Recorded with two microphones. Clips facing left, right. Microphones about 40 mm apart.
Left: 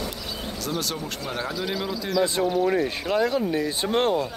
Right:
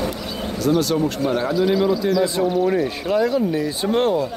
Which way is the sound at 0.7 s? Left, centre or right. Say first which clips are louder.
Right 12 dB; centre.